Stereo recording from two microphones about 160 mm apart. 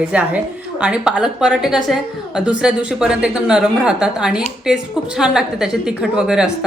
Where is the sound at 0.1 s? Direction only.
10° right (ahead or behind).